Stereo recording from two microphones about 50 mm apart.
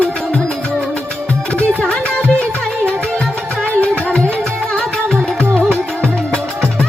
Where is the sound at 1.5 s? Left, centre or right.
Left.